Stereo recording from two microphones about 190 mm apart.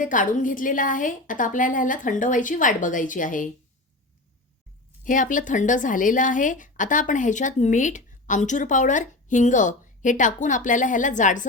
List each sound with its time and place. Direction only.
0.0 s a woman's voice: 45° left (ahead or behind)
5.0 s a woman's voice: 45° left (ahead or behind)